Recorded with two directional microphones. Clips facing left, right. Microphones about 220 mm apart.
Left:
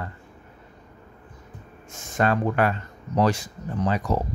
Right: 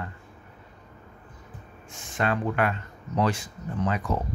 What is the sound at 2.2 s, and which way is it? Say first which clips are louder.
Speech: left 4 dB; 40° left (ahead or behind).